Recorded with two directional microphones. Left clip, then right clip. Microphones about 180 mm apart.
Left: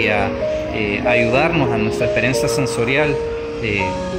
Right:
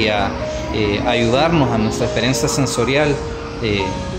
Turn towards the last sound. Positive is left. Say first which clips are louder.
# even
turn(degrees=0)  # may be behind; listen again after turning